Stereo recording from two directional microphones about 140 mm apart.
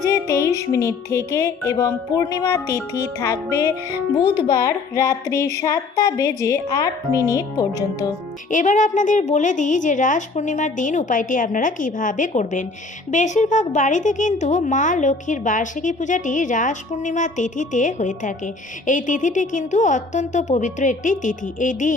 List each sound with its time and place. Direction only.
0.0 s music: 20° left (ahead or behind)
8.4 s a woman's voice: 65° left (ahead or behind)